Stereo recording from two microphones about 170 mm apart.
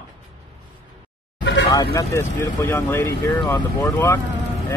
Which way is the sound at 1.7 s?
20° left (ahead or behind).